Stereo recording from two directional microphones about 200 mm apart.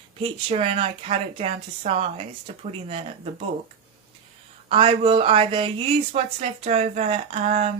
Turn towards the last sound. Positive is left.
turn(degrees=-35)  # may be behind; listen again after turning